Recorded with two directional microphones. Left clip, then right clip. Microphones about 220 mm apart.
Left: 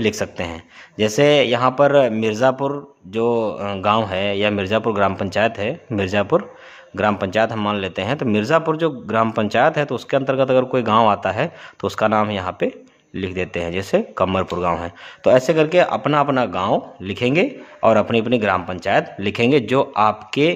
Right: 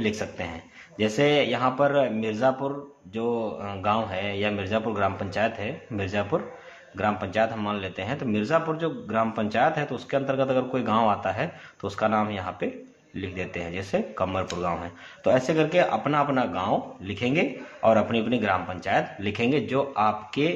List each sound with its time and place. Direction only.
0.0 s a man's voice: 50° left (ahead or behind)